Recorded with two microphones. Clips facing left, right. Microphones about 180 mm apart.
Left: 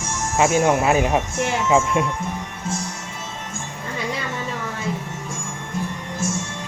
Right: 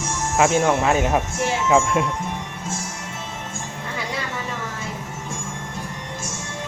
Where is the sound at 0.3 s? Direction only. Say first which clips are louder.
Left 1 dB; 5° left (ahead or behind).